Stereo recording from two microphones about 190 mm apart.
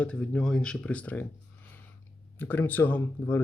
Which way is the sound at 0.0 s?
5° left (ahead or behind).